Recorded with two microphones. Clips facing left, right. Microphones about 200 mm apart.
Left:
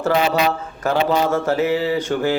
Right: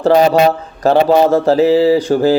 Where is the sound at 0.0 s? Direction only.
40° right (ahead or behind).